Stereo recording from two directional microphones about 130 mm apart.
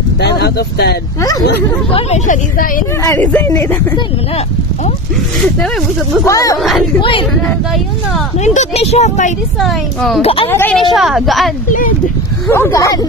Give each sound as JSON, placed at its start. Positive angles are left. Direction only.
{"t": 1.9, "sound": "speech", "side_deg": 55}
{"t": 3.2, "sound": "speech", "side_deg": 10}
{"t": 3.4, "sound": "speech", "side_deg": 25}
{"t": 6.2, "sound": "speech", "side_deg": 25}
{"t": 7.0, "sound": "speech", "side_deg": 40}
{"t": 8.5, "sound": "speech", "side_deg": 60}
{"t": 9.6, "sound": "a woman's voice", "side_deg": 0}
{"t": 10.2, "sound": "speech", "side_deg": 45}
{"t": 10.5, "sound": "speech", "side_deg": 15}
{"t": 10.8, "sound": "a woman's voice", "side_deg": 0}
{"t": 12.4, "sound": "speech", "side_deg": 20}